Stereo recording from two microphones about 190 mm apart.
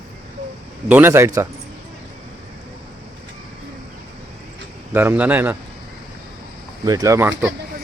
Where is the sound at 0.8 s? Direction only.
10° right (ahead or behind).